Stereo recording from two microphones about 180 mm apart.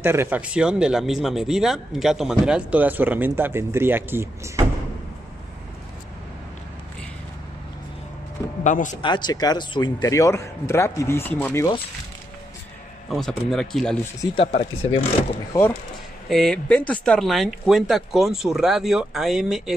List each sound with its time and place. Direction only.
0.0 s speech: 15° right (ahead or behind)
8.6 s speech: 45° left (ahead or behind)
9.0 s speech: 25° left (ahead or behind)
13.1 s speech: centre (ahead or behind)
14.2 s speech: 30° left (ahead or behind)
15.5 s speech: 15° left (ahead or behind)
16.3 s speech: centre (ahead or behind)